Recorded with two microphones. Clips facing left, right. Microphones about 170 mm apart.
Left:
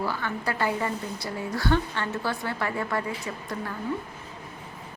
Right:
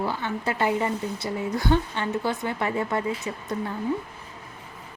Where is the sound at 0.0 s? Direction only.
25° right (ahead or behind).